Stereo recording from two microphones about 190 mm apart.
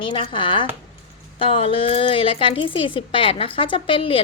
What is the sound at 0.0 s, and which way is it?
A woman's voice, 25° left (ahead or behind).